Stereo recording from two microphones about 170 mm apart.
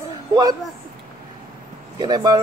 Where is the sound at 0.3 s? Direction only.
25° right (ahead or behind).